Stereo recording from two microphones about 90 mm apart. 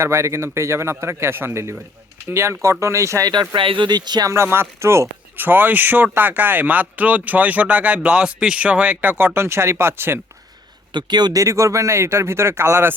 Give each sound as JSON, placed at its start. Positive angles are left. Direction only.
{"t": 0.0, "sound": "speech", "side_deg": -30}
{"t": 3.5, "sound": "speech", "side_deg": -70}
{"t": 3.8, "sound": "speech", "side_deg": -50}
{"t": 4.3, "sound": "speech", "side_deg": -30}
{"t": 10.9, "sound": "speech", "side_deg": -55}
{"t": 11.3, "sound": "speech", "side_deg": -35}